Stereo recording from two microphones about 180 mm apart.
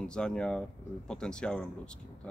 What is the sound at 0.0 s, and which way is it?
Speech, 5° left (ahead or behind).